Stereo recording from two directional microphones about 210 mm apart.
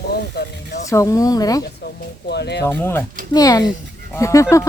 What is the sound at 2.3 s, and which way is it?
Speech, 55° left (ahead or behind).